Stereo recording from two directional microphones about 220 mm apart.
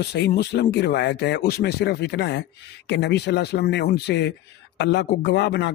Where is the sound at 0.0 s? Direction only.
50° left (ahead or behind).